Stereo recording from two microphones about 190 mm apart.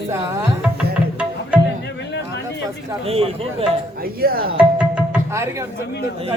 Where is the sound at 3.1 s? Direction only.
30° right (ahead or behind).